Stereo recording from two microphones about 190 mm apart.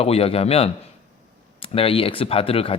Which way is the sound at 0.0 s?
30° left (ahead or behind).